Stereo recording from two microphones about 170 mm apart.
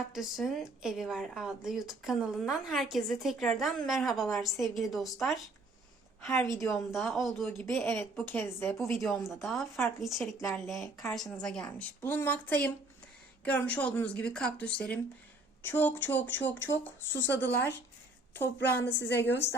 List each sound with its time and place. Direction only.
0.1 s speech: centre (ahead or behind)
6.5 s speech: centre (ahead or behind)
7.6 s speech: 10° left (ahead or behind)
8.8 s speech: centre (ahead or behind)
18.6 s a woman's voice: 80° left